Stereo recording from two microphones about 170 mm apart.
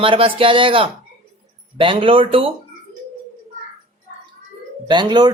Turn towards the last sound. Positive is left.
turn(degrees=-25)  # may be behind; listen again after turning